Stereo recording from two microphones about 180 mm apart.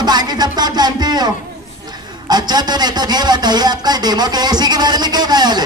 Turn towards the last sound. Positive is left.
turn(degrees=-25)  # may be behind; listen again after turning